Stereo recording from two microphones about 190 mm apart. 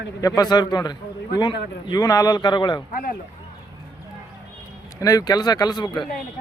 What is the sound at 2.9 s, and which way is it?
Speech, 50° left (ahead or behind).